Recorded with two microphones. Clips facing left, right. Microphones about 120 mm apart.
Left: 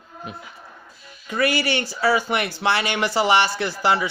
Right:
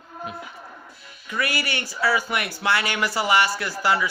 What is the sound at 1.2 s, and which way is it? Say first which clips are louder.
Speech: left 6 dB; 30° left (ahead or behind).